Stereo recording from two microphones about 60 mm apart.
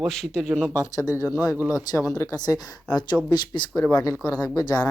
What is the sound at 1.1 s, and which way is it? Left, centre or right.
Speech, left.